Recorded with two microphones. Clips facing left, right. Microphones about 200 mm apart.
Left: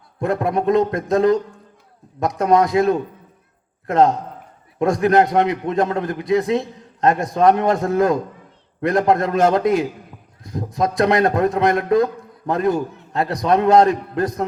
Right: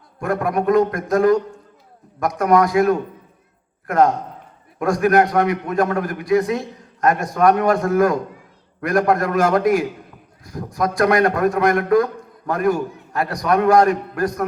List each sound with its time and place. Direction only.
0.2 s a man's voice: 25° left (ahead or behind)